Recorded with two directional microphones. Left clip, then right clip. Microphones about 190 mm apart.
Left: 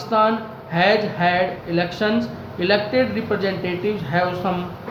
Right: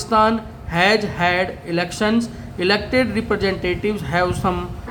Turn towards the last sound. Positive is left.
turn(degrees=-25)  # may be behind; listen again after turning